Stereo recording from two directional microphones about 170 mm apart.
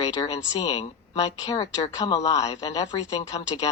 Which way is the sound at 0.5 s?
35° left (ahead or behind).